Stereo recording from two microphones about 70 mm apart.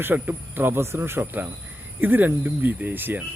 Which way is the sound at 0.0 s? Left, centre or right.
Right.